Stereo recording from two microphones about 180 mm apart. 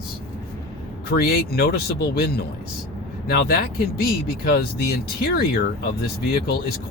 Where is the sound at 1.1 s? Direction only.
60° left (ahead or behind).